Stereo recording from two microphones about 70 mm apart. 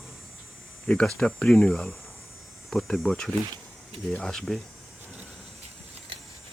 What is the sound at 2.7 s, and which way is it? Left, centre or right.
Speech, centre.